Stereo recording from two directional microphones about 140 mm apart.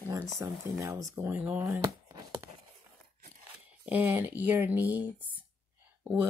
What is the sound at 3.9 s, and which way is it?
Speech, 10° right (ahead or behind).